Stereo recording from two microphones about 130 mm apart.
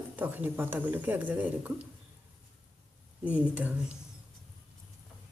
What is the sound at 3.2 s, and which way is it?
Speech, 10° right (ahead or behind).